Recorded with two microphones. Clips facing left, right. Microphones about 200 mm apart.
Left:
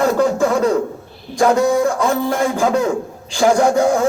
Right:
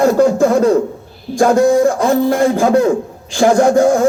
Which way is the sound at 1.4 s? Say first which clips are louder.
Right 4 dB; 50° right (ahead or behind).